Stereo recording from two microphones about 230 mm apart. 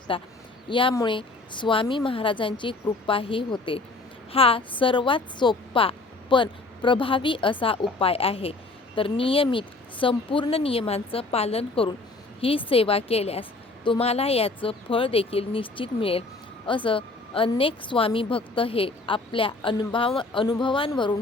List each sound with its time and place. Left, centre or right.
0.1 s a woman's voice: left